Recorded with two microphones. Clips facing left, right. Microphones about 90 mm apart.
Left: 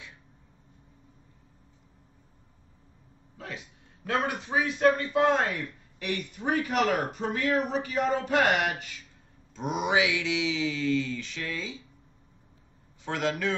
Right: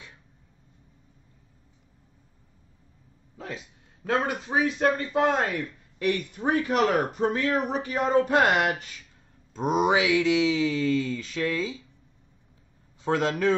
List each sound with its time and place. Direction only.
3.3 s a man's voice: 30° right (ahead or behind)
6.0 s speech: 40° right (ahead or behind)
13.0 s speech: 40° right (ahead or behind)